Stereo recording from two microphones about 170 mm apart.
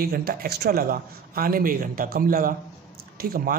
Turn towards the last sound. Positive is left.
turn(degrees=-60)  # may be behind; listen again after turning